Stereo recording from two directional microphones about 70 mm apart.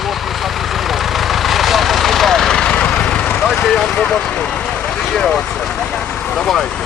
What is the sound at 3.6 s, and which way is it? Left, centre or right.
Speech, centre.